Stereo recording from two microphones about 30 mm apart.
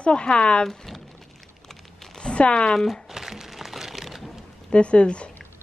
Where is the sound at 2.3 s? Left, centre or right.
Left.